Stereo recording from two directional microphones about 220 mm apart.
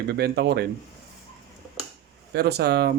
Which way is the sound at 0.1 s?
50° right (ahead or behind).